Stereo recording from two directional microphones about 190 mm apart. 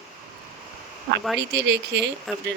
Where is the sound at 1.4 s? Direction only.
65° right (ahead or behind).